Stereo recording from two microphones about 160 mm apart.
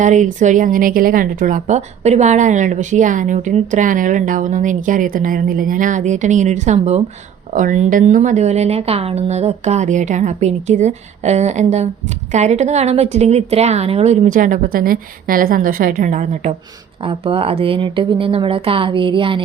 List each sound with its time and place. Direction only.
0.0 s a woman's voice: 50° right (ahead or behind)
17.0 s speech: 35° right (ahead or behind)